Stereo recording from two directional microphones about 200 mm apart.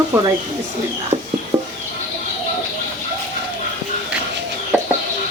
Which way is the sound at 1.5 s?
20° right (ahead or behind).